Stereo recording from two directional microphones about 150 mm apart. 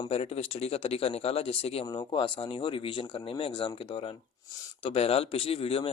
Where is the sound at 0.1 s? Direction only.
40° left (ahead or behind).